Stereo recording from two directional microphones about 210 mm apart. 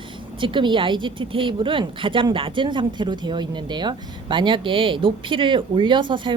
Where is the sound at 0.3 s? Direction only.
25° right (ahead or behind).